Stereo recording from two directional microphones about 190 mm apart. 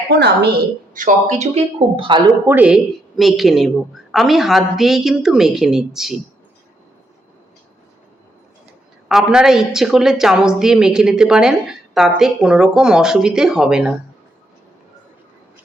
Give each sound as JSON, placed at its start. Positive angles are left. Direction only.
{"t": 0.1, "sound": "a woman's voice", "side_deg": -60}
{"t": 0.9, "sound": "speech", "side_deg": -40}
{"t": 2.5, "sound": "a woman's voice", "side_deg": -5}
{"t": 9.0, "sound": "a woman's voice", "side_deg": -5}